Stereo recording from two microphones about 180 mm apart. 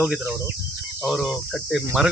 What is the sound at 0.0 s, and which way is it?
Speech, 10° right (ahead or behind).